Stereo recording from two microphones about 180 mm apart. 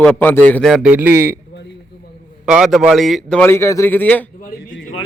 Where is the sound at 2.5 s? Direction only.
Centre (ahead or behind).